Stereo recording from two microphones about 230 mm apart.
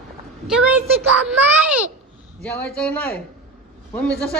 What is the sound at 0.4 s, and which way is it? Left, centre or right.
Speech, centre.